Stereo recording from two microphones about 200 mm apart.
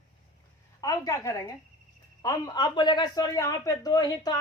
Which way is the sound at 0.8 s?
15° left (ahead or behind).